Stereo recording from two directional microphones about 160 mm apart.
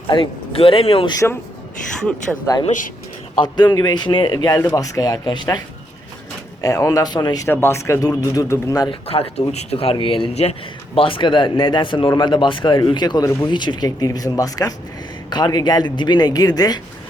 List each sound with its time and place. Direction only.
0.1 s speech: 35° left (ahead or behind)
1.1 s speech: 20° left (ahead or behind)
2.0 s speech: 10° left (ahead or behind)
2.6 s speech: 55° left (ahead or behind)
3.4 s speech: 25° left (ahead or behind)
6.6 s speech: 20° left (ahead or behind)
8.9 s speech: 40° left (ahead or behind)